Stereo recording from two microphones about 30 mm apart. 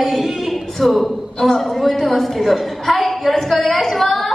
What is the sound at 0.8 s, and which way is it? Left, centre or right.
Speech, centre.